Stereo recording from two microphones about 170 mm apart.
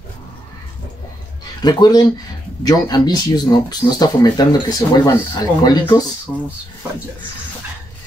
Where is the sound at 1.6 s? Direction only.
25° left (ahead or behind).